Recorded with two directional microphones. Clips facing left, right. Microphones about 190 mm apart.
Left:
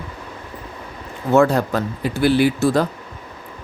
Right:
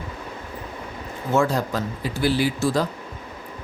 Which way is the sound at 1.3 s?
65° left (ahead or behind).